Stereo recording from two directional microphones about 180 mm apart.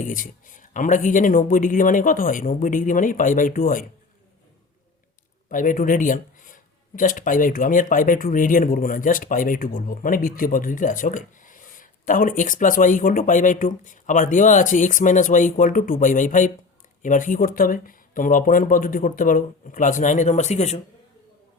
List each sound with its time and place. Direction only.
0.0 s speech: 45° left (ahead or behind)
5.5 s speech: 45° left (ahead or behind)